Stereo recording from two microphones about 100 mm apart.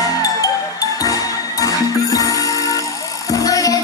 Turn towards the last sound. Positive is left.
turn(degrees=35)  # may be behind; listen again after turning